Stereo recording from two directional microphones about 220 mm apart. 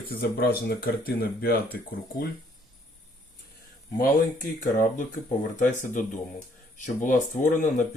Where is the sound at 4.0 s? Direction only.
35° left (ahead or behind).